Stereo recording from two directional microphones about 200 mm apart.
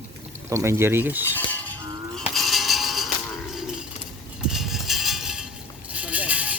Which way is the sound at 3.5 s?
Centre (ahead or behind).